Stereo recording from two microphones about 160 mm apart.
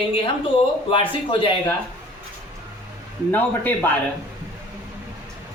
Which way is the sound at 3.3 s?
10° left (ahead or behind).